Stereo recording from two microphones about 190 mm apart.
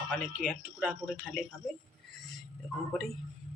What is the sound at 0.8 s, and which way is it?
Speech, 5° right (ahead or behind).